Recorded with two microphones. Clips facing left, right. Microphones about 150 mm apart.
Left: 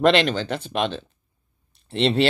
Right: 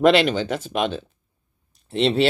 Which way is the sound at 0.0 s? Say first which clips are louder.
Right 2 dB; 5° right (ahead or behind).